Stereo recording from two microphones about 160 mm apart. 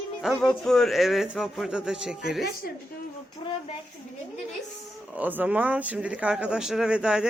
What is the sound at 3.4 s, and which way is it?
Speech, 35° left (ahead or behind).